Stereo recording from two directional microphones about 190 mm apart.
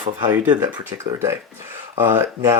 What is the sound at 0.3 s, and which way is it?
Speech, 15° right (ahead or behind).